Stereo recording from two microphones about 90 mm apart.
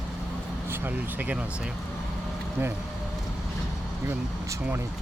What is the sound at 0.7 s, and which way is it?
Speech, 20° right (ahead or behind).